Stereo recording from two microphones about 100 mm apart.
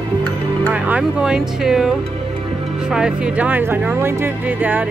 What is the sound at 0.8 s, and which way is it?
Speech, 10° right (ahead or behind).